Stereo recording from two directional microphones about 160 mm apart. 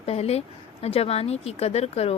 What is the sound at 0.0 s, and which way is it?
A woman's voice, 40° left (ahead or behind).